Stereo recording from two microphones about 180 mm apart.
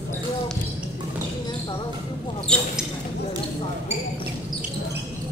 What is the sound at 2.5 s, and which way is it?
Basketball bounce, 5° left (ahead or behind).